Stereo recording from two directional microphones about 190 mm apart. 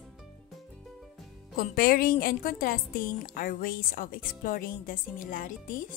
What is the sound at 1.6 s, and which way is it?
A woman's voice, 50° left (ahead or behind).